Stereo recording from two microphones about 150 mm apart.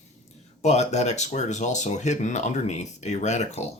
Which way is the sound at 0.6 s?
50° left (ahead or behind).